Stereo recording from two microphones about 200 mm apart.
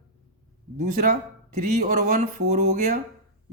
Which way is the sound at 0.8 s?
45° right (ahead or behind).